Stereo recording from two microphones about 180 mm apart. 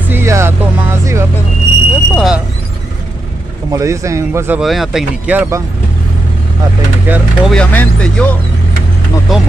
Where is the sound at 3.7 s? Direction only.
15° right (ahead or behind).